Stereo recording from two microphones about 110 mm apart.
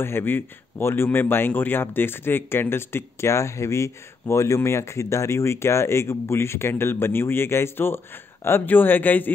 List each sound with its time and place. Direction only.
0.0 s speech: 20° left (ahead or behind)